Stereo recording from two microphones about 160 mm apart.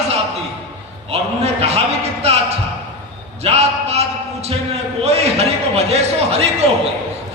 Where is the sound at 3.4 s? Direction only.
40° right (ahead or behind).